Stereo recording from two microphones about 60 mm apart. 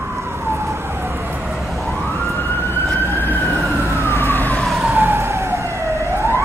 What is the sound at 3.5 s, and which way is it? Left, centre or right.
Emergency vehicle, right.